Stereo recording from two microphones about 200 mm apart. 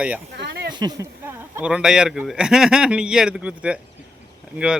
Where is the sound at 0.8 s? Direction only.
20° right (ahead or behind).